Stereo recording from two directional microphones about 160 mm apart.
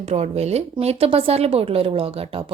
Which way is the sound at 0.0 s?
40° right (ahead or behind).